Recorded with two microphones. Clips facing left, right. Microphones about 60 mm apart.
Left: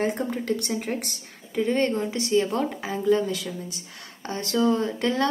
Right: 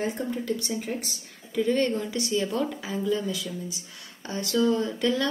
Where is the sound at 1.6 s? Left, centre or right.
Left.